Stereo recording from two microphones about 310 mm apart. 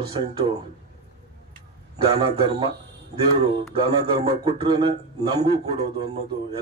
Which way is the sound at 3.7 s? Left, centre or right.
Centre.